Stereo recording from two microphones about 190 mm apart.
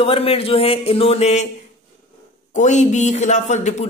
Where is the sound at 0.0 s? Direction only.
30° left (ahead or behind).